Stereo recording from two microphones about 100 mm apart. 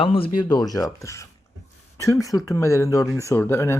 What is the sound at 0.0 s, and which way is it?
Speech, 65° left (ahead or behind).